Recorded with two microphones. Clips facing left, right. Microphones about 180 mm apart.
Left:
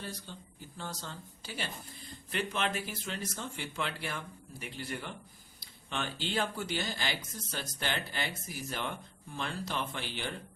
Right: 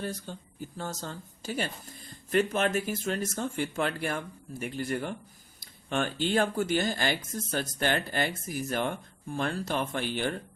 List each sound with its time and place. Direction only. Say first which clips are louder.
0.0 s speech: right 7 dB; 50° right (ahead or behind)